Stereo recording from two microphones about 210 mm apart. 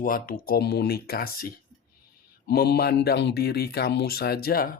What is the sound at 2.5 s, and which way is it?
Speech, 50° left (ahead or behind).